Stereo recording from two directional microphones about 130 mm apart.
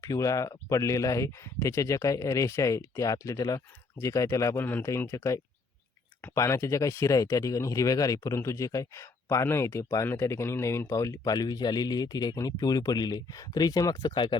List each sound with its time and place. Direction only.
0.0 s speech: 25° left (ahead or behind)